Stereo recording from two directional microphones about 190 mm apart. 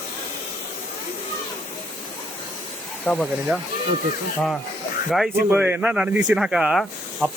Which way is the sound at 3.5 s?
5° right (ahead or behind).